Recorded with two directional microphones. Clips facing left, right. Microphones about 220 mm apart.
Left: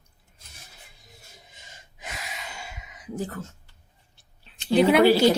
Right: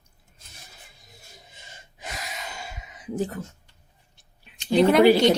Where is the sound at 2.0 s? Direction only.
35° right (ahead or behind).